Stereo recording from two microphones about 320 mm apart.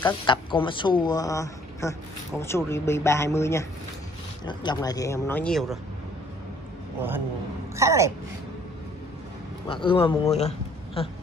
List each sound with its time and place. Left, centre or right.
0.0 s speech: centre
7.0 s speech: centre
9.7 s speech: centre